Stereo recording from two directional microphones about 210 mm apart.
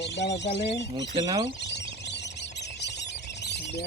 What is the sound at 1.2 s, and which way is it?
Speech, 20° right (ahead or behind).